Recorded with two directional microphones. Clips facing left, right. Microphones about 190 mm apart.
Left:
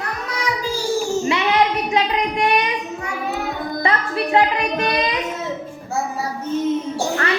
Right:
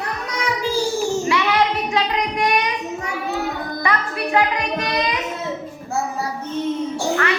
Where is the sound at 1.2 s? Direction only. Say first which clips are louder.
Left 2 dB; 20° left (ahead or behind).